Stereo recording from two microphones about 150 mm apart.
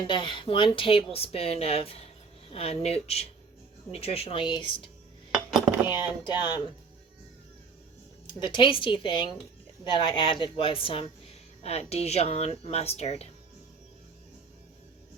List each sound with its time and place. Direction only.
0.1 s speech: 30° left (ahead or behind)
5.3 s a sound: centre (ahead or behind)
5.9 s speech: 30° left (ahead or behind)
8.3 s speech: 30° left (ahead or behind)